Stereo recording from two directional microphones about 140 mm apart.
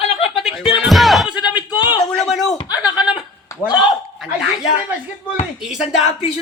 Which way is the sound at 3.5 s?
20° left (ahead or behind).